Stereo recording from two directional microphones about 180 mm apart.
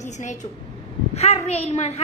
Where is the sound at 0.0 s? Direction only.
40° left (ahead or behind).